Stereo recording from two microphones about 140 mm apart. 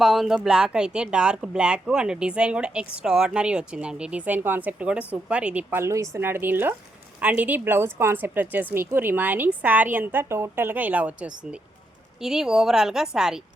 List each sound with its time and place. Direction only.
0.0 s a woman's voice: centre (ahead or behind)